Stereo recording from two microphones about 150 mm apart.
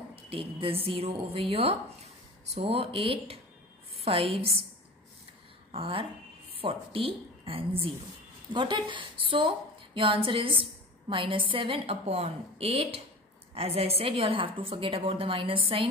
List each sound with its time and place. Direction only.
0.1 s a woman's voice: 40° right (ahead or behind)
5.7 s a woman's voice: 40° right (ahead or behind)